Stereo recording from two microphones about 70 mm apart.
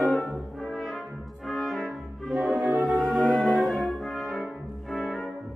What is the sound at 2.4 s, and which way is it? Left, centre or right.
Music, centre.